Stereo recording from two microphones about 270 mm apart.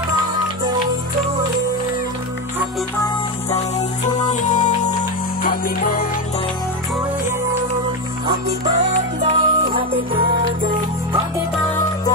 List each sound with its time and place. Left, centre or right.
3.4 s music: left
8.7 s music: right